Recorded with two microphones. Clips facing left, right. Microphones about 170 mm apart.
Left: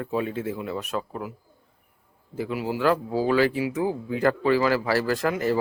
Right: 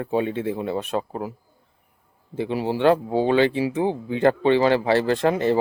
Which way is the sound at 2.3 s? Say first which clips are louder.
Right 4 dB; 30° right (ahead or behind).